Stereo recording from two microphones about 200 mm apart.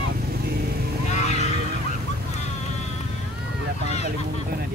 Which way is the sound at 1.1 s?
35° left (ahead or behind).